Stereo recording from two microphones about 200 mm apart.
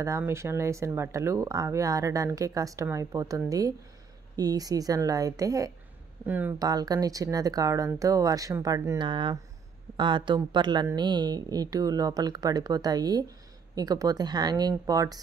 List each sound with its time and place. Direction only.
0.0 s speech: 15° right (ahead or behind)
6.7 s speech: 20° right (ahead or behind)